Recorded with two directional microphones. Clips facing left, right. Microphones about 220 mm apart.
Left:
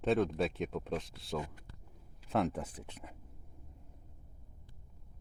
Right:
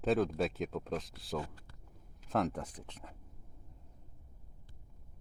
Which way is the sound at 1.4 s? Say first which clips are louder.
Even; 15° left (ahead or behind).